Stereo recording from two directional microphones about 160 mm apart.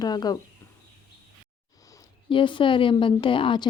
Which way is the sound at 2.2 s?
30° left (ahead or behind).